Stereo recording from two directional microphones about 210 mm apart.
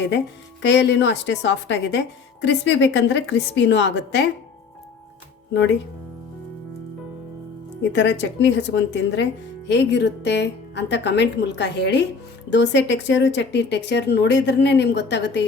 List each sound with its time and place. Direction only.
0.6 s a woman's voice: 55° left (ahead or behind)
7.9 s a woman's voice: 55° left (ahead or behind)